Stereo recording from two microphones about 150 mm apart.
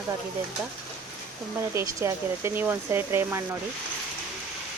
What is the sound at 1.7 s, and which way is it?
Speech, 20° right (ahead or behind).